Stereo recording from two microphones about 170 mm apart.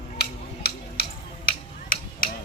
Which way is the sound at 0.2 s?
70° left (ahead or behind).